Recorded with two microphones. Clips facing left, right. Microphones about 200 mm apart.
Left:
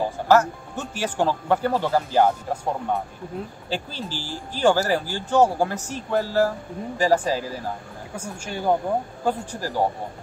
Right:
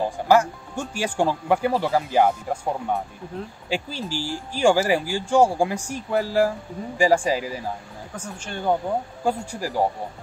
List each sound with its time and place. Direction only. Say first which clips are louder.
0.3 s speech: even; 10° right (ahead or behind)
8.2 s a woman's voice: left 2 dB; 10° left (ahead or behind)
9.2 s speech: even; 10° right (ahead or behind)